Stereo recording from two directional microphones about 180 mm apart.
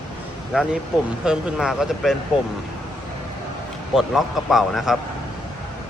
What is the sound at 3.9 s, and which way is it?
Speech, centre (ahead or behind).